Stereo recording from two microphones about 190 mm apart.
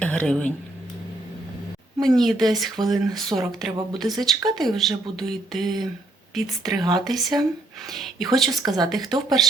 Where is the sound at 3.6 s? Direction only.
Centre (ahead or behind).